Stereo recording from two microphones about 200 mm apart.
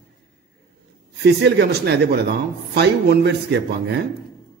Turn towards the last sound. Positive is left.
turn(degrees=-60)  # may be behind; listen again after turning